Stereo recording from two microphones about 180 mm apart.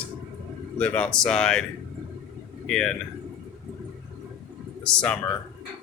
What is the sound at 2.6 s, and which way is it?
Speech, 5° left (ahead or behind).